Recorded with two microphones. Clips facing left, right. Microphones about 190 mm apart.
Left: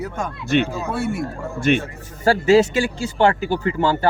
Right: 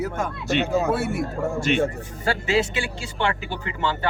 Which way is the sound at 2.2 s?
40° left (ahead or behind).